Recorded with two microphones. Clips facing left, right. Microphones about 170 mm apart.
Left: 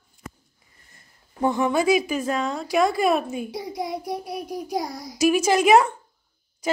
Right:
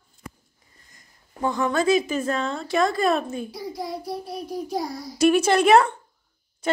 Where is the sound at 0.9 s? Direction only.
25° left (ahead or behind); by 3.5 s 10° left (ahead or behind).